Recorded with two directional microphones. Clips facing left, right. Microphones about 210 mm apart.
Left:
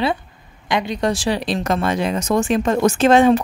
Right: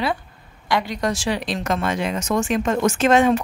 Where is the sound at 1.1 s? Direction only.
35° left (ahead or behind).